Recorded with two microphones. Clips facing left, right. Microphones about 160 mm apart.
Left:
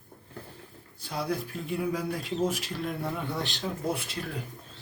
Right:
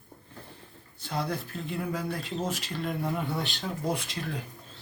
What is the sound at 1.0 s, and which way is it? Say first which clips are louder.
Speech: left 1 dB; 10° left (ahead or behind).